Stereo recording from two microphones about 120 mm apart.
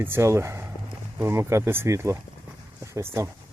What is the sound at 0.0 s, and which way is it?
Speech, 20° right (ahead or behind).